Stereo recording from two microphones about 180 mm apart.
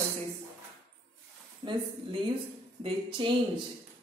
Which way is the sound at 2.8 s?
30° right (ahead or behind).